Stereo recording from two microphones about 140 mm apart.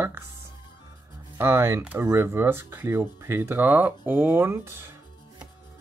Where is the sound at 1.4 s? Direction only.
20° right (ahead or behind).